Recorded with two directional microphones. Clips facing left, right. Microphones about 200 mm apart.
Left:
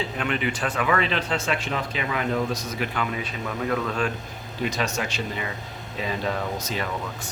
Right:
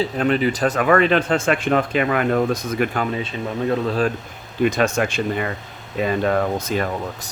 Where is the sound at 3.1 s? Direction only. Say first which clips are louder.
Right 5 dB; 30° right (ahead or behind).